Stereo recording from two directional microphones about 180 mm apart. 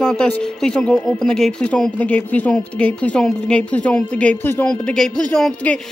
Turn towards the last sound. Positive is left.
turn(degrees=5)  # may be behind; listen again after turning